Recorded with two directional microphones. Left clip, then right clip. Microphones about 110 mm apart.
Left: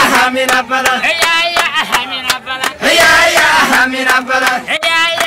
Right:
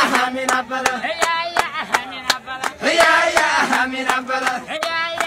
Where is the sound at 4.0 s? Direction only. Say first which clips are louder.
Left 9 dB; 10° left (ahead or behind).